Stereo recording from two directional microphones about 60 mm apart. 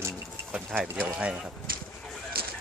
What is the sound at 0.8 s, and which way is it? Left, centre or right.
Speech, right.